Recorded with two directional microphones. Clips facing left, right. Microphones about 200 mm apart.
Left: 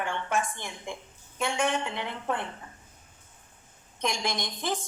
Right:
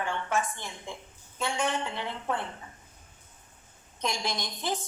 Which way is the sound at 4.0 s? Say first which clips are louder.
Left 2 dB; 15° left (ahead or behind).